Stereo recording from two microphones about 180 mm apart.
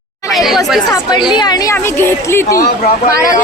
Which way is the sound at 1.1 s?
25° left (ahead or behind).